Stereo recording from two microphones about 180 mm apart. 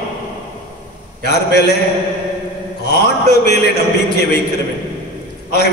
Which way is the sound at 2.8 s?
65° left (ahead or behind).